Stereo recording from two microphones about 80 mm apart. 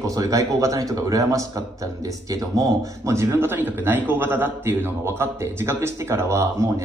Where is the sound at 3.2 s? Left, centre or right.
Right.